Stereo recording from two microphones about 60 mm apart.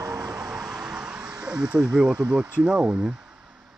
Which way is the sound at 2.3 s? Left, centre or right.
Right.